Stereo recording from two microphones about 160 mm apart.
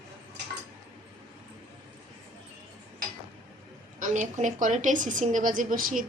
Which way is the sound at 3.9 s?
50° right (ahead or behind).